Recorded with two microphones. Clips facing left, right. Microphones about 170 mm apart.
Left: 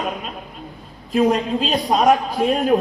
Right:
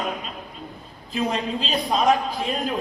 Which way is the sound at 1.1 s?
50° left (ahead or behind).